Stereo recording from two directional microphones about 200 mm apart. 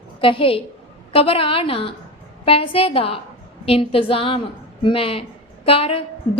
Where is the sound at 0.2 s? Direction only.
25° left (ahead or behind).